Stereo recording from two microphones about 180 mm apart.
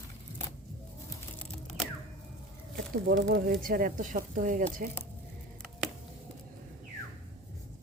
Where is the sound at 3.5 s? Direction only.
50° right (ahead or behind).